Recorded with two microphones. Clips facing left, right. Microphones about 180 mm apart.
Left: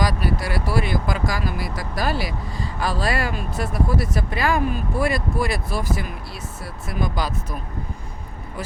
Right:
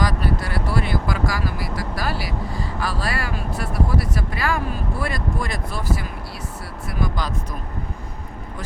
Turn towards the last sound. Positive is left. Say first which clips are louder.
# even
turn(degrees=20)  # may be behind; listen again after turning